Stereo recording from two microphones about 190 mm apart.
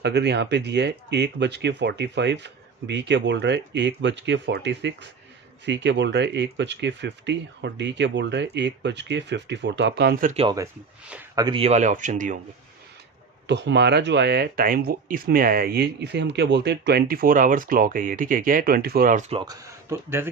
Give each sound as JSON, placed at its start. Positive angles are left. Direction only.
{"t": 0.0, "sound": "speech", "side_deg": -60}
{"t": 10.3, "sound": "speech", "side_deg": -25}
{"t": 13.5, "sound": "speech", "side_deg": -65}
{"t": 19.3, "sound": "speech", "side_deg": -20}